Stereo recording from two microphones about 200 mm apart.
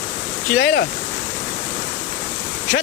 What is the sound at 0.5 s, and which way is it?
Speech, 55° left (ahead or behind).